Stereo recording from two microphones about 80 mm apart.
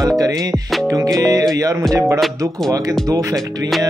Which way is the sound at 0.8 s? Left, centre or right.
Right.